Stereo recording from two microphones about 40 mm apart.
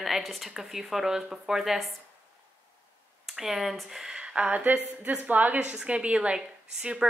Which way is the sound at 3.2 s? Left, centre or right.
Centre.